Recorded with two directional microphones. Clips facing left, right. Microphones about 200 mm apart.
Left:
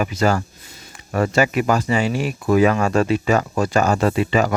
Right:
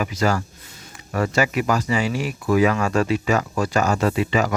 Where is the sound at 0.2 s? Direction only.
30° left (ahead or behind).